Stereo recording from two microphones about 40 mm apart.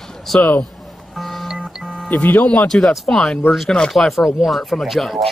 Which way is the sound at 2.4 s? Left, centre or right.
Centre.